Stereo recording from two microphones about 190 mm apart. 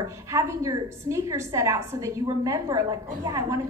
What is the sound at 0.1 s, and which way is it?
A woman's voice, 15° right (ahead or behind).